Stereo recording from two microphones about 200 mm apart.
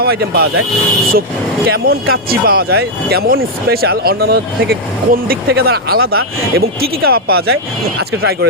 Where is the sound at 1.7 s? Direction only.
50° right (ahead or behind).